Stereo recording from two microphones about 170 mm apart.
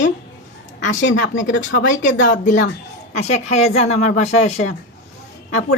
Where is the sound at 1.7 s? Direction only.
50° left (ahead or behind).